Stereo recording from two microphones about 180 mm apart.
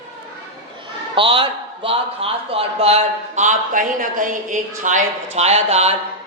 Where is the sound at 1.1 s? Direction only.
30° right (ahead or behind).